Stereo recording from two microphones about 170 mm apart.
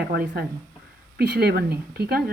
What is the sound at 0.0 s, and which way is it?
Speech, 65° right (ahead or behind).